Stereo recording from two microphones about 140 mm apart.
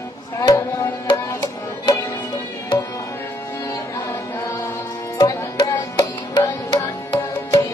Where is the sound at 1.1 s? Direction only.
30° left (ahead or behind).